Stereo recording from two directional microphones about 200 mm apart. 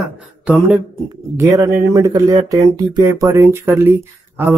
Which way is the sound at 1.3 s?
15° right (ahead or behind).